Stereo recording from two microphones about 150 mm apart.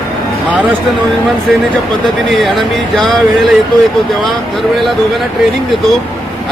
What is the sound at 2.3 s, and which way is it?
Speech, centre (ahead or behind).